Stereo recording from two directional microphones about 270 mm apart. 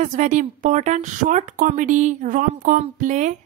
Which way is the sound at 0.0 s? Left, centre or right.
Right.